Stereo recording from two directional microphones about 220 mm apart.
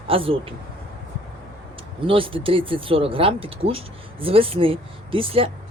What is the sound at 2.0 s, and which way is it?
Speech, 25° right (ahead or behind).